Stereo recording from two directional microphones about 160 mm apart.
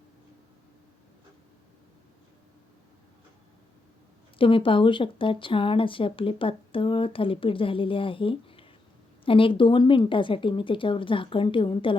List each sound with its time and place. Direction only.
4.4 s speech: 35° left (ahead or behind)